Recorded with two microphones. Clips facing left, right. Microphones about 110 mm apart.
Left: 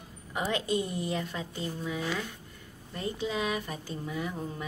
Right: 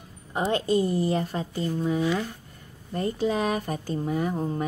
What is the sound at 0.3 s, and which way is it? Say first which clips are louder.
A woman's voice: right 6 dB; 35° right (ahead or behind).